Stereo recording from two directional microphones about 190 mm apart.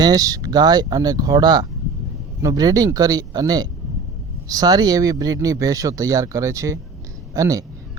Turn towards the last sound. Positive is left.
turn(degrees=-15)  # may be behind; listen again after turning